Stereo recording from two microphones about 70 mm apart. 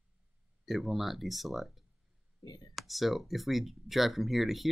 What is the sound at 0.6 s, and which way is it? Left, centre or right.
Speech, centre.